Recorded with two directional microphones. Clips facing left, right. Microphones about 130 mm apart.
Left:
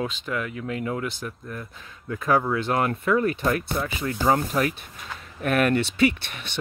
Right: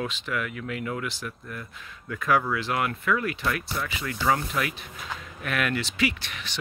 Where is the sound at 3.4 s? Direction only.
45° left (ahead or behind).